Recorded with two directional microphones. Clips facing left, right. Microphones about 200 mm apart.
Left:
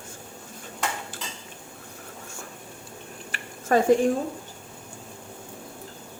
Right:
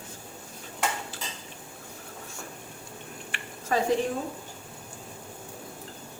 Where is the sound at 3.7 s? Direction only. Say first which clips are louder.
Left 6 dB; 55° left (ahead or behind).